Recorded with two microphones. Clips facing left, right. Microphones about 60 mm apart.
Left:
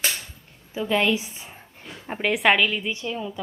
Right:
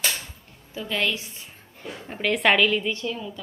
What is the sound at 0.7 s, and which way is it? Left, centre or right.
A woman's voice, centre.